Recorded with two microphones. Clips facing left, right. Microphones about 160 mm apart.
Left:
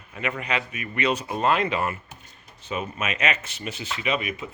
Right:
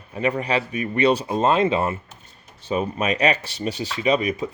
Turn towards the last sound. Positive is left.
turn(degrees=-35)  # may be behind; listen again after turning